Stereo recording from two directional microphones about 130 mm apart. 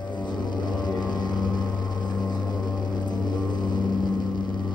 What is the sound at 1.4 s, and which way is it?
Vehicle, 35° left (ahead or behind).